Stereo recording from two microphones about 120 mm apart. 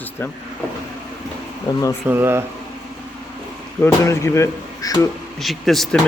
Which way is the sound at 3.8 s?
25° left (ahead or behind).